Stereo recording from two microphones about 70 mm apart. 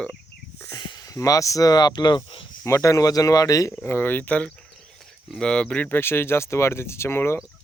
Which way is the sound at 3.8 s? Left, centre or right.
Left.